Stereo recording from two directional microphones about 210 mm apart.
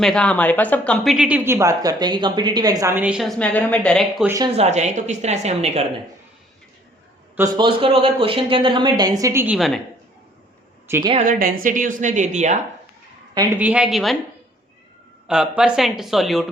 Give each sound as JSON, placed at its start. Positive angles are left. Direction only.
{"t": 0.0, "sound": "a woman's voice", "side_deg": 5}
{"t": 4.5, "sound": "a woman's voice", "side_deg": -30}
{"t": 7.3, "sound": "speech", "side_deg": -15}
{"t": 10.8, "sound": "a woman's voice", "side_deg": -10}
{"t": 11.3, "sound": "a woman's voice", "side_deg": -40}
{"t": 13.6, "sound": "a woman's voice", "side_deg": -5}
{"t": 15.3, "sound": "a woman's voice", "side_deg": -5}